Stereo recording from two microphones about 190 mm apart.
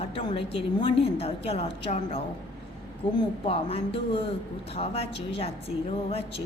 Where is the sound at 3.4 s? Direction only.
30° left (ahead or behind).